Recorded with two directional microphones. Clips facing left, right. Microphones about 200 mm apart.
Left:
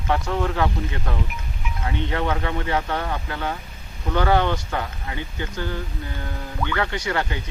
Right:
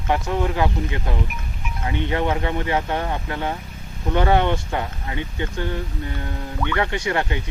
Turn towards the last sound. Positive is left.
turn(degrees=-25)  # may be behind; listen again after turning